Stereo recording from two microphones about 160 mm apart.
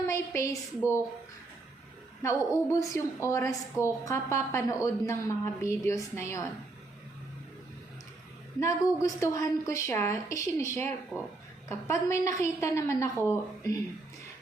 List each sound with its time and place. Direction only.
0.1 s a woman's voice: 20° left (ahead or behind)
2.2 s a woman's voice: 20° left (ahead or behind)
8.6 s a woman's voice: 20° left (ahead or behind)